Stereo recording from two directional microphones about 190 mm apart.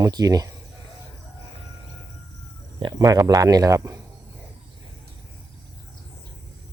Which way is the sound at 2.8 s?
20° right (ahead or behind).